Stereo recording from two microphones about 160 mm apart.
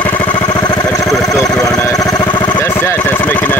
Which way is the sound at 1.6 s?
20° left (ahead or behind).